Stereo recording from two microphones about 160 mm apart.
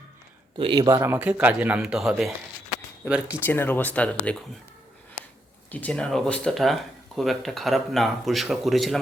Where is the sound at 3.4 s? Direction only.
15° left (ahead or behind).